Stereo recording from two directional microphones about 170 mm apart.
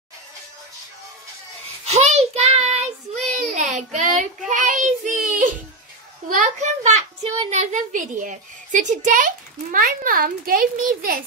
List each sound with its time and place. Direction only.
1.9 s child singing: 40° right (ahead or behind)
6.2 s a child's voice: 50° right (ahead or behind)